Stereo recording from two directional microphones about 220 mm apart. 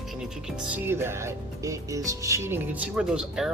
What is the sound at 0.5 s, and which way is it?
Speech, 5° right (ahead or behind).